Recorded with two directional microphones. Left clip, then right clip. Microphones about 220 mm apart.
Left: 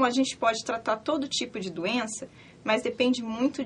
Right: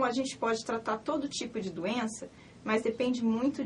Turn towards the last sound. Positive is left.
turn(degrees=25)  # may be behind; listen again after turning